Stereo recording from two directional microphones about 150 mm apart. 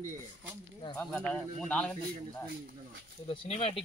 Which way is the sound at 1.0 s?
5° left (ahead or behind).